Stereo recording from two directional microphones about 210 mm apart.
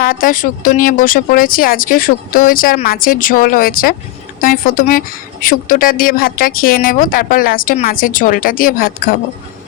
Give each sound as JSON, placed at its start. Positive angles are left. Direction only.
{"t": 0.0, "sound": "speech", "side_deg": 40}